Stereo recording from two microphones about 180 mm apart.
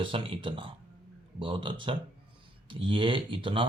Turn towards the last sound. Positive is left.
turn(degrees=-30)  # may be behind; listen again after turning